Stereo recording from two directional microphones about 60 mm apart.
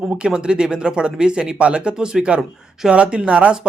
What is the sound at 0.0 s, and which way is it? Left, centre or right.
Speech, centre.